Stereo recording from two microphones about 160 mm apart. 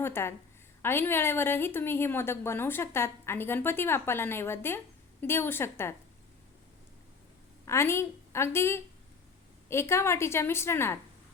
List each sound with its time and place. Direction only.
0.0 s a woman's voice: 15° left (ahead or behind)
7.6 s a woman's voice: 15° left (ahead or behind)